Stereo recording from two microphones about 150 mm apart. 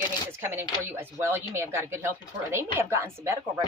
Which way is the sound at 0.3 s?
15° right (ahead or behind).